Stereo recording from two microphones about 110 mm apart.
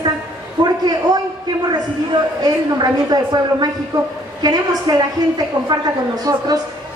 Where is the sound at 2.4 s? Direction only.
35° right (ahead or behind).